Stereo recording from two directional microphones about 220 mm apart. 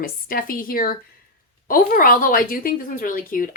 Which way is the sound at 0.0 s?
40° left (ahead or behind).